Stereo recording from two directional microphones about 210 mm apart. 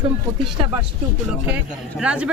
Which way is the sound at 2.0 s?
5° right (ahead or behind).